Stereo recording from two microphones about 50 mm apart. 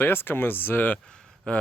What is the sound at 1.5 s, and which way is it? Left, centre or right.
Speech, left.